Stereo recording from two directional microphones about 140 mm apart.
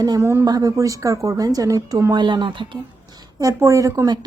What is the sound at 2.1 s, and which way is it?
Speech, 35° right (ahead or behind).